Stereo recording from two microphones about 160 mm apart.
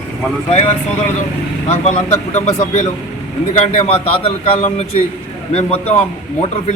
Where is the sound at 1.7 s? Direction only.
45° left (ahead or behind).